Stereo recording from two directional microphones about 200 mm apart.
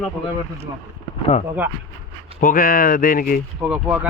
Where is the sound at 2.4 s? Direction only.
45° left (ahead or behind).